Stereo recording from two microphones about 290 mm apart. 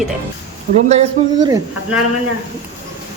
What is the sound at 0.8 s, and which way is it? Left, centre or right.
Speech, right.